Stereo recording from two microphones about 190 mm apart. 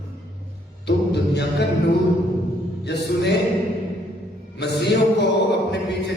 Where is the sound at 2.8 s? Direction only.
60° left (ahead or behind).